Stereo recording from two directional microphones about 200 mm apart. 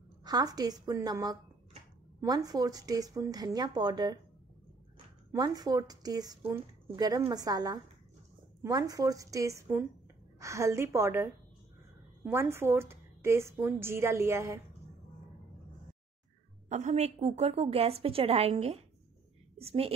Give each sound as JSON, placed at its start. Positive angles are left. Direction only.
{"t": 0.2, "sound": "a woman's voice", "side_deg": -20}
{"t": 5.3, "sound": "a woman's voice", "side_deg": -20}
{"t": 12.3, "sound": "a woman's voice", "side_deg": -10}
{"t": 16.6, "sound": "a woman's voice", "side_deg": -35}